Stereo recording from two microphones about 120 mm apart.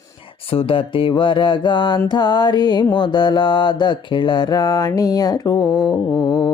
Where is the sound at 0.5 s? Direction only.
50° left (ahead or behind).